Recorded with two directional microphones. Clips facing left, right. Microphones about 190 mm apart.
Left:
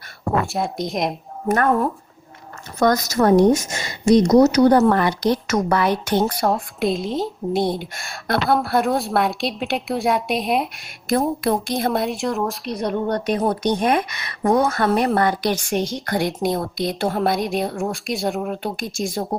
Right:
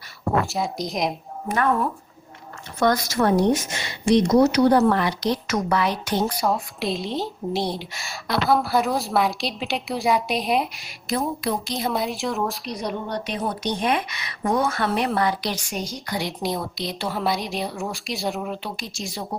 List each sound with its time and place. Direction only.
0.4 s a woman's voice: centre (ahead or behind)
1.5 s speech: 45° left (ahead or behind)
6.3 s a woman's voice: centre (ahead or behind)
11.1 s speech: 50° left (ahead or behind)
11.9 s a woman's voice: centre (ahead or behind)
13.1 s speech: 50° left (ahead or behind)
15.7 s a woman's voice: centre (ahead or behind)
16.0 s speech: 50° left (ahead or behind)
17.3 s a woman's voice: centre (ahead or behind)
18.6 s speech: 50° left (ahead or behind)